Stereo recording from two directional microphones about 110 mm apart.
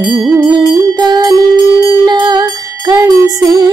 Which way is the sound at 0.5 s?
40° right (ahead or behind).